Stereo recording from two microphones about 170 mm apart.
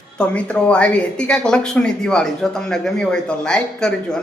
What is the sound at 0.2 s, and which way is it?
A woman's voice, 5° left (ahead or behind).